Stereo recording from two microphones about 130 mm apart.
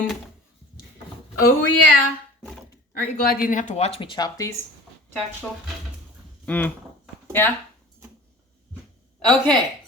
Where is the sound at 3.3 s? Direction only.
85° left; by 4.5 s 30° left (ahead or behind).